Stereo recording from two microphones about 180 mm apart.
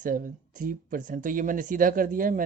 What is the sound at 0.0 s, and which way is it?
Speech, 50° right (ahead or behind).